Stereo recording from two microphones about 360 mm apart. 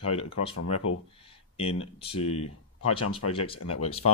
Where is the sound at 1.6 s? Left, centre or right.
Centre.